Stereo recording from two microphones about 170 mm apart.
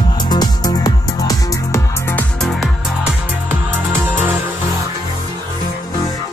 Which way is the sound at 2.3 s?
Centre (ahead or behind).